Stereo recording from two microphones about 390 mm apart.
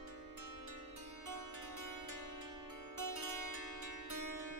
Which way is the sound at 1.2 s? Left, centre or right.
Right.